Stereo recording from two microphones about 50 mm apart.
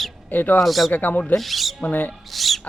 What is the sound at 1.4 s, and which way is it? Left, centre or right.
Speech, centre.